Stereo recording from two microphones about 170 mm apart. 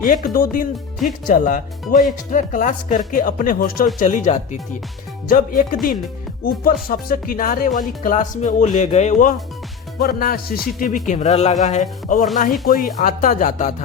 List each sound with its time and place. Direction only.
0.0 s speech: 55° left (ahead or behind)
10.0 s speech: 60° left (ahead or behind)